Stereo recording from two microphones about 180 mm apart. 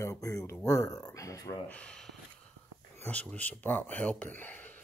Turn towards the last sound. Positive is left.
turn(degrees=10)  # may be behind; listen again after turning